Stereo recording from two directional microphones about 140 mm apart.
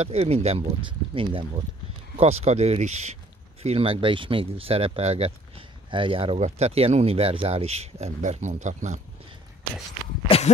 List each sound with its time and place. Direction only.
0.0 s speech: 45° right (ahead or behind)
2.1 s speech: 50° right (ahead or behind)
10.2 s a sound: 45° left (ahead or behind)